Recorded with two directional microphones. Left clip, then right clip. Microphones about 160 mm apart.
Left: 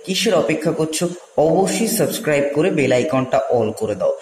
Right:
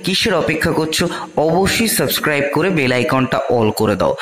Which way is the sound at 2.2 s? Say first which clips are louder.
Even; 30° right (ahead or behind).